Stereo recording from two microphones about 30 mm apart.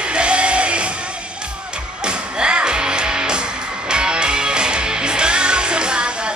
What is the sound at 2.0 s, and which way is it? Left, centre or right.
Music, right.